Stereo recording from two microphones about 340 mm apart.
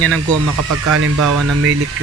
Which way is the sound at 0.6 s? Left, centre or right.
Right.